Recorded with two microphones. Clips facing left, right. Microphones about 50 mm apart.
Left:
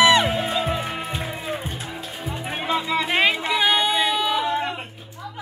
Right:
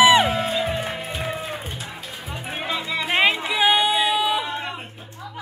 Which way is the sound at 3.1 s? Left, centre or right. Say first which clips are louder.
Right 2 dB; centre.